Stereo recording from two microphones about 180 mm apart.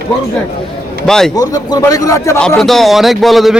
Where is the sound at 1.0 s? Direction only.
5° left (ahead or behind).